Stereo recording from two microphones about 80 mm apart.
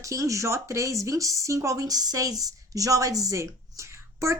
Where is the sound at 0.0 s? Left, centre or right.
Right.